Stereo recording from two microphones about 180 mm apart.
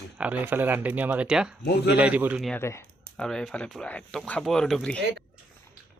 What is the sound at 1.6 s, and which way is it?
Speech, 65° left (ahead or behind).